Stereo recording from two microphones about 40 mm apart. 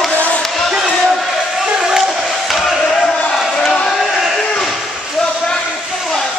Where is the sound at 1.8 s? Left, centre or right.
Centre.